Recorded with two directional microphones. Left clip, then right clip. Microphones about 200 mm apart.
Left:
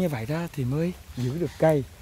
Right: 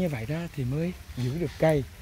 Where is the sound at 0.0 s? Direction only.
25° left (ahead or behind).